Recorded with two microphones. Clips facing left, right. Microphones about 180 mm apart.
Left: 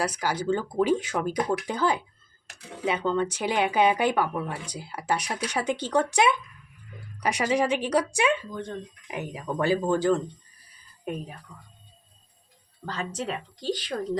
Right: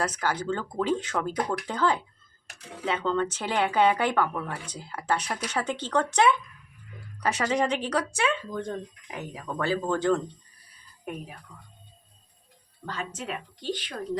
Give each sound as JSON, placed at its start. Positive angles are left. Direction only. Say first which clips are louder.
{"t": 0.0, "sound": "speech", "louder": "left 1 dB", "side_deg": 10}
{"t": 12.8, "sound": "a woman's voice", "louder": "left 3 dB", "side_deg": 35}